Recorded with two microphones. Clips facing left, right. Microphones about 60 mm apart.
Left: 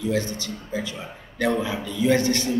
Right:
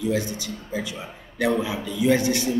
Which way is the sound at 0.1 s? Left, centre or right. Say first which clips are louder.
Even; centre.